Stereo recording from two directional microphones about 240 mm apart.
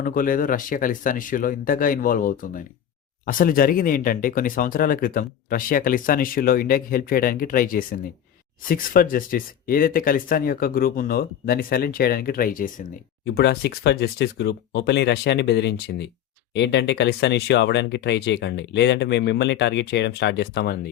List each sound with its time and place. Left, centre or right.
0.0 s speech: left